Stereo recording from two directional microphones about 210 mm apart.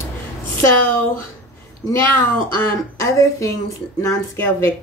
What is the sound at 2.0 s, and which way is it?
Speech, 10° left (ahead or behind).